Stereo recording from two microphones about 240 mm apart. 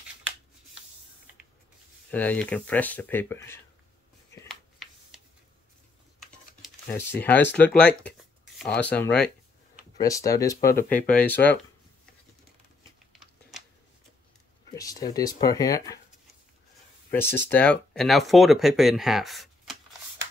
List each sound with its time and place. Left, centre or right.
2.0 s speech: centre
4.5 s a sound: centre
6.1 s typing: centre
7.5 s speech: centre
13.1 s a sound: centre
14.8 s speech: centre
17.1 s speech: centre